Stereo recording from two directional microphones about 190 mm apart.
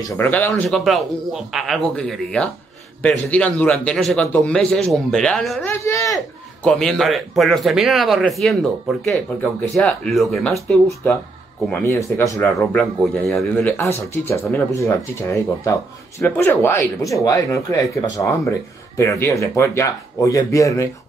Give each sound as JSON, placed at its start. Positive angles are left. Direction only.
{"t": 0.2, "sound": "speech", "side_deg": 10}
{"t": 5.7, "sound": "speech", "side_deg": 15}
{"t": 6.6, "sound": "speech", "side_deg": 5}
{"t": 11.7, "sound": "speech", "side_deg": 15}
{"t": 12.5, "sound": "speech", "side_deg": 0}